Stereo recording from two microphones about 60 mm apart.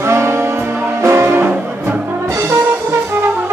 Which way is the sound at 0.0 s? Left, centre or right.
Right.